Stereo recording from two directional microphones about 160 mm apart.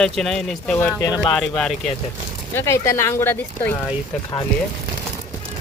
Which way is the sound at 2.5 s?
15° left (ahead or behind).